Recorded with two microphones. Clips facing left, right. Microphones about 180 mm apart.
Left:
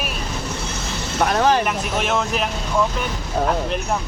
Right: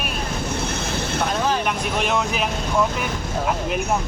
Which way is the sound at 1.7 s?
Centre (ahead or behind).